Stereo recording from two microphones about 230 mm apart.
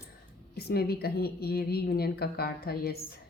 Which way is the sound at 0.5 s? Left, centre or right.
Left.